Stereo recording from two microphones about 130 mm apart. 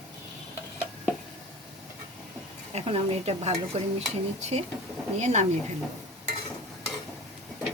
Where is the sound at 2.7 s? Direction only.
50° right (ahead or behind).